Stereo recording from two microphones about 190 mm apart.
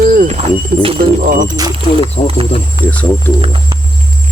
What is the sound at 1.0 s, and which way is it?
Speech, 50° right (ahead or behind).